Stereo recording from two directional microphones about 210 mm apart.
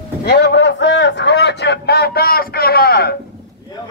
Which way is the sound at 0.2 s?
55° left (ahead or behind).